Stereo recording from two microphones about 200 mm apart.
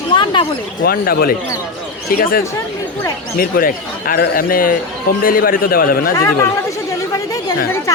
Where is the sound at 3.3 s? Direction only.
45° left (ahead or behind).